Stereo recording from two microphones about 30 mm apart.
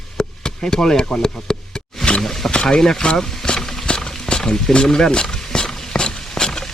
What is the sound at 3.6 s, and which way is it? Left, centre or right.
Wild animals, centre.